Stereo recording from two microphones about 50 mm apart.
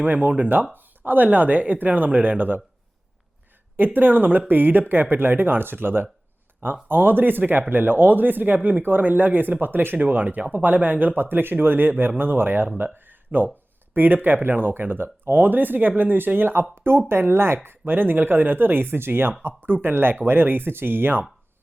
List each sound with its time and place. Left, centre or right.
0.0 s speech: right
3.8 s speech: right